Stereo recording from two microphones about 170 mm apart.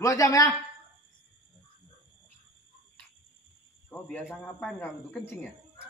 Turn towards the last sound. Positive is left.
turn(degrees=10)  # may be behind; listen again after turning